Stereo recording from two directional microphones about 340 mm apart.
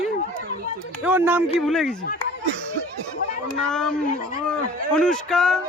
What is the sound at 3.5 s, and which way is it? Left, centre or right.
A man's voice, centre.